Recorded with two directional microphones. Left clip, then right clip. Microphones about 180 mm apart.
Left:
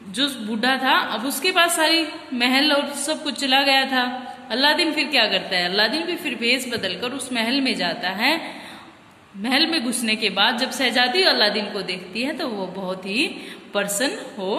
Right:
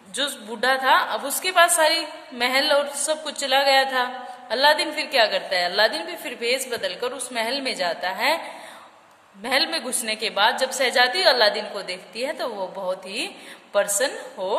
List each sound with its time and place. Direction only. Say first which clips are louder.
0.1 s a woman's voice: left 3 dB; 55° right (ahead or behind)
9.4 s a woman's voice: left 2 dB; 55° right (ahead or behind)